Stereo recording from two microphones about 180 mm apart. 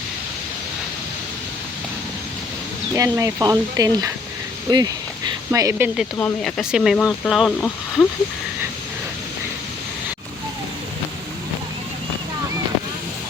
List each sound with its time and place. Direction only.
2.9 s speech: 15° right (ahead or behind)
6.1 s speech: 10° left (ahead or behind)
6.6 s speech: centre (ahead or behind)